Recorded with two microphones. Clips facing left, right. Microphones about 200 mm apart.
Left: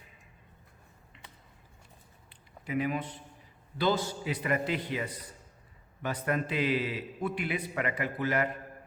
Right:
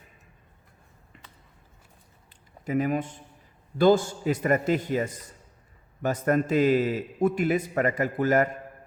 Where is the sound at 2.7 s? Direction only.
45° right (ahead or behind).